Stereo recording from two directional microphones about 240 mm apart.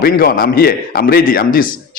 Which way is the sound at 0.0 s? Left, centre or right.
Left.